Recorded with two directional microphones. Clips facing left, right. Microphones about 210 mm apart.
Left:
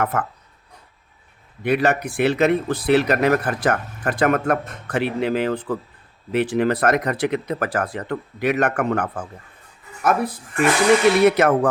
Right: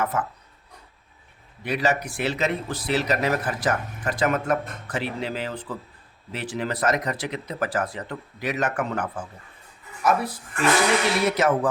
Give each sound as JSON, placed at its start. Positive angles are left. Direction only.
{"t": 0.0, "sound": "a man's voice", "side_deg": 60}
{"t": 1.6, "sound": "a man's voice", "side_deg": 55}